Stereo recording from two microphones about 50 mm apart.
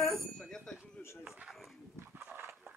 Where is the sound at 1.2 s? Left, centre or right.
Centre.